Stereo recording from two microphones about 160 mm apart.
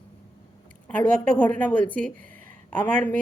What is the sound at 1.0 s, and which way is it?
Speech, 55° right (ahead or behind).